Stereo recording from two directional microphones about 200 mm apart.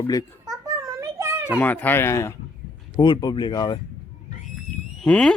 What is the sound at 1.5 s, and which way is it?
Speech, 10° left (ahead or behind).